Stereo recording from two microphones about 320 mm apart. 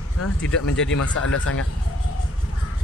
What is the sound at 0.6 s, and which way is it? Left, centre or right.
Speech, left.